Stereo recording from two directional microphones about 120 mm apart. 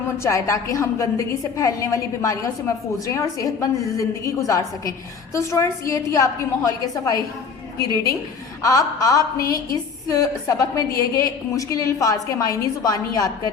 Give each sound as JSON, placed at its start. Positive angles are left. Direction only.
{"t": 0.2, "sound": "a woman's voice", "side_deg": 25}
{"t": 8.6, "sound": "a woman's voice", "side_deg": 30}